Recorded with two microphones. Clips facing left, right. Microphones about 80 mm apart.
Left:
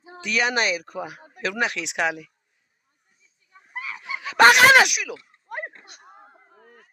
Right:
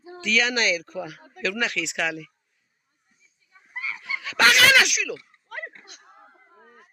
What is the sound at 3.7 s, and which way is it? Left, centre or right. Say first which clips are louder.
Goose: even; left.